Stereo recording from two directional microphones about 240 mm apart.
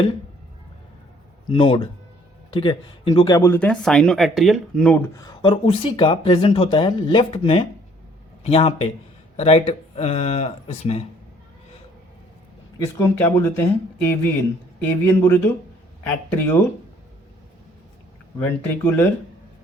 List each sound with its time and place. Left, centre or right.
1.5 s speech: left
12.8 s speech: centre
18.3 s speech: centre